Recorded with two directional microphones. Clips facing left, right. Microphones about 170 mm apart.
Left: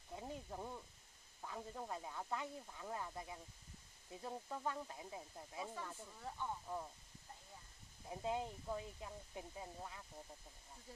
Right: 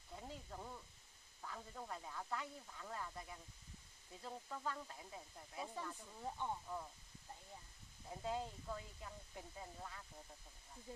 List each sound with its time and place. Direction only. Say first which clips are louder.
0.1 s a sound: left 4 dB; 20° left (ahead or behind)
1.4 s speech: left 3 dB; 20° left (ahead or behind)
6.2 s speech: right 2 dB; 20° right (ahead or behind)
8.1 s speech: left 2 dB; 20° left (ahead or behind)